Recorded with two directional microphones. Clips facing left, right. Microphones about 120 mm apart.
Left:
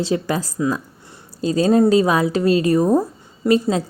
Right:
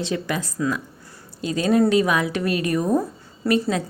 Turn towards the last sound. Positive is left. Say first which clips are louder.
# left 4 dB
turn(degrees=25)  # may be behind; listen again after turning